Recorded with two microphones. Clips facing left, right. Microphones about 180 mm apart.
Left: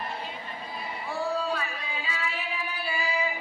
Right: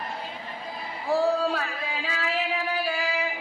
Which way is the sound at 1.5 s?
80° right.